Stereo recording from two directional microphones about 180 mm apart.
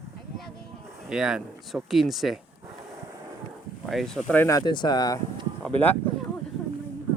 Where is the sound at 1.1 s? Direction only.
5° right (ahead or behind).